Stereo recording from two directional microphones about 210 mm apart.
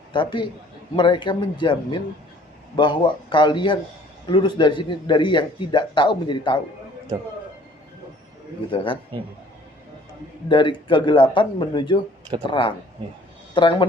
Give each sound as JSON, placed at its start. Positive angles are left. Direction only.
{"t": 0.1, "sound": "speech", "side_deg": 20}
{"t": 8.7, "sound": "speech", "side_deg": 25}
{"t": 10.5, "sound": "speech", "side_deg": 25}